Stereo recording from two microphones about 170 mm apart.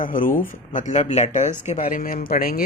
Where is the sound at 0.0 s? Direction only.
55° left (ahead or behind).